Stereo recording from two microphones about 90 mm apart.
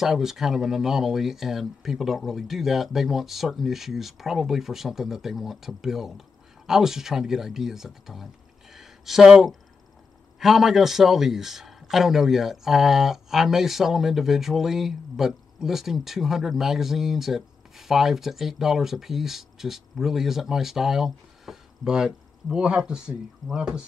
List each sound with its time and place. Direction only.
0.0 s a man's voice: 5° right (ahead or behind)
8.7 s a sound: 5° right (ahead or behind)
10.4 s a man's voice: 5° right (ahead or behind)